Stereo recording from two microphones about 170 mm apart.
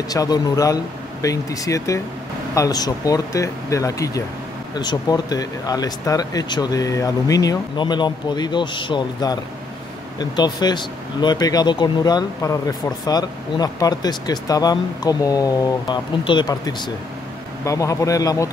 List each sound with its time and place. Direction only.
0.1 s speech: 20° left (ahead or behind)